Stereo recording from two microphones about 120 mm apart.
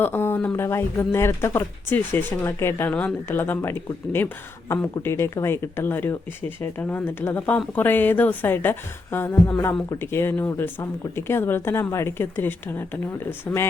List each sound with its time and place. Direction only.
0.0 s a woman's voice: 20° left (ahead or behind)